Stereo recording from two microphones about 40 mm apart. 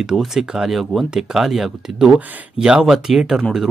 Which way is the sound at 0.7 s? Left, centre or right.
Centre.